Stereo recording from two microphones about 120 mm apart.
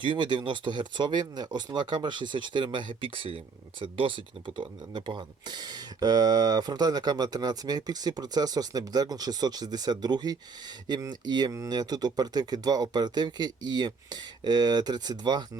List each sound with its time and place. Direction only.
0.0 s speech: 40° right (ahead or behind)